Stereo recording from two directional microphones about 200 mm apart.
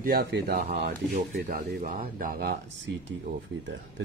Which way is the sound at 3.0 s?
65° right (ahead or behind).